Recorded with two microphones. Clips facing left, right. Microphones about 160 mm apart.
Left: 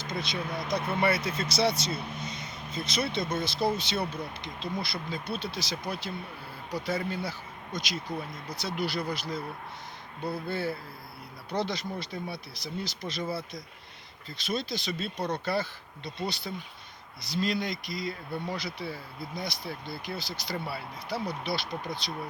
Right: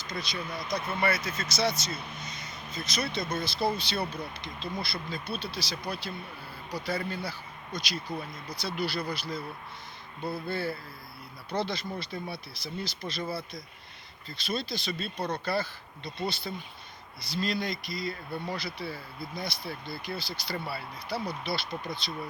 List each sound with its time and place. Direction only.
0.0 s speech: 25° left (ahead or behind)
14.3 s speech: 20° left (ahead or behind)